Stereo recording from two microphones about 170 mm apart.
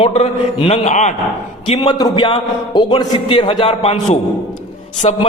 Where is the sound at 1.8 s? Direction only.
25° left (ahead or behind).